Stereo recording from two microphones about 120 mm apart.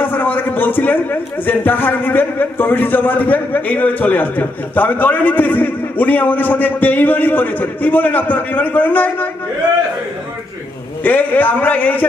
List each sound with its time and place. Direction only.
0.0 s a sound: 15° left (ahead or behind)
1.4 s a man's voice: 15° left (ahead or behind)
11.1 s a man's voice: 15° left (ahead or behind)